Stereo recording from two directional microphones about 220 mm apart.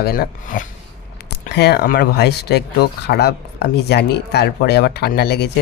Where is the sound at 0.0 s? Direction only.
40° left (ahead or behind).